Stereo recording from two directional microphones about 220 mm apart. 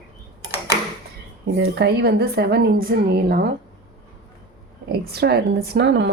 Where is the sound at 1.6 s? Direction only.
50° right (ahead or behind).